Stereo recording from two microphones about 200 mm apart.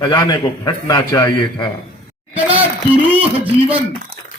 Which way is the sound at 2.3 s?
10° right (ahead or behind).